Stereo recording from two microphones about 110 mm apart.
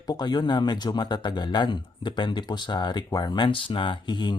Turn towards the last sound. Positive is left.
turn(degrees=45)  # may be behind; listen again after turning